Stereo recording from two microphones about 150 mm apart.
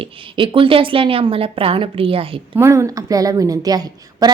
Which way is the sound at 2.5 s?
20° right (ahead or behind).